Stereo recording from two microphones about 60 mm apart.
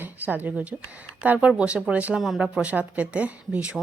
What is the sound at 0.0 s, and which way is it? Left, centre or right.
Speech, right.